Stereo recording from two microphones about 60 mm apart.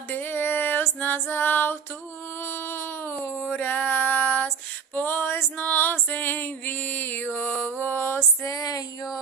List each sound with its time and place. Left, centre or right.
0.1 s music: left
2.4 s a sound: left
4.9 s female singing: left
8.4 s music: left